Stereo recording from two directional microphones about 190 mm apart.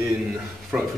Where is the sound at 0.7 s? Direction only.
5° right (ahead or behind).